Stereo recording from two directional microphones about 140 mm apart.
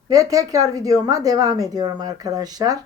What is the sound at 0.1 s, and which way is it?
Speech, 25° right (ahead or behind).